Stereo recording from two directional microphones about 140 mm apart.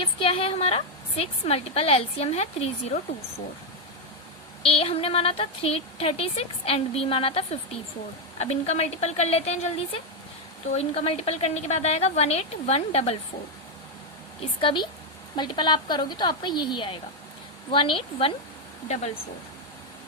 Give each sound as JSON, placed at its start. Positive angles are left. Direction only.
{"t": 0.0, "sound": "a woman's voice", "side_deg": 40}
{"t": 4.6, "sound": "a woman's voice", "side_deg": 40}
{"t": 14.6, "sound": "a woman's voice", "side_deg": 35}